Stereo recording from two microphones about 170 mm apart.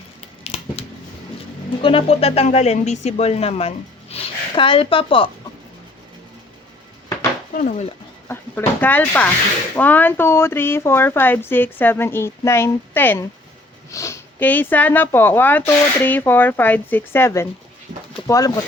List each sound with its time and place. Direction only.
0.4 s a sound: 35° left (ahead or behind)
1.8 s speech: 30° left (ahead or behind)
7.5 s speech: 50° left (ahead or behind)
8.3 s speech: 10° left (ahead or behind)